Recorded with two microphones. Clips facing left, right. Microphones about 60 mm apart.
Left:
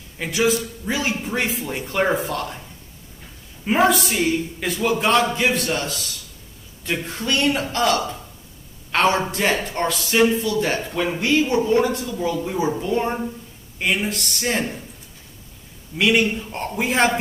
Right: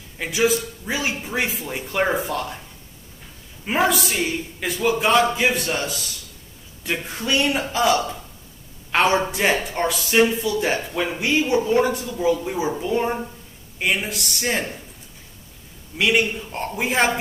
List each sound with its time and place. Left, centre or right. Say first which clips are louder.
0.2 s a man's voice: even; centre
3.6 s a man's voice: left 3 dB; centre
11.8 s speech: even; right
12.2 s a man's voice: right 2 dB; centre
16.0 s a man's voice: left 1 dB; centre